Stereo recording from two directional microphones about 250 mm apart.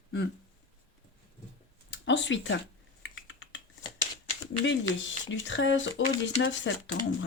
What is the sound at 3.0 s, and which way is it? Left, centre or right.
Typing, left.